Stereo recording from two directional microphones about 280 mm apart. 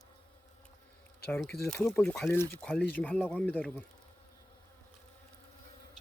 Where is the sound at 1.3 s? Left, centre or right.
Centre.